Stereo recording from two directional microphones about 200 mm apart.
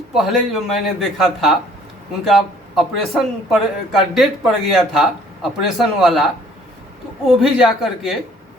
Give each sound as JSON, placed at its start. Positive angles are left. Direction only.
{"t": 0.1, "sound": "a man's voice", "side_deg": 0}